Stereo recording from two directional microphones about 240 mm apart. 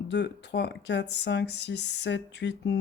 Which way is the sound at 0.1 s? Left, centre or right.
Left.